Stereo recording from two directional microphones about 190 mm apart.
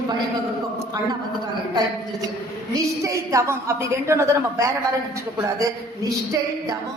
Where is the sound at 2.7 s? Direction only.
15° right (ahead or behind).